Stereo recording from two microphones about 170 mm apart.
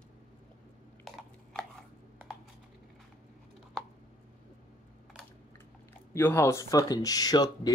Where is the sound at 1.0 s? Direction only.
Centre (ahead or behind).